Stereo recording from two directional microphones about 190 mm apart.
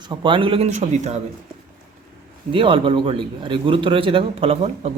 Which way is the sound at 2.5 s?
25° right (ahead or behind).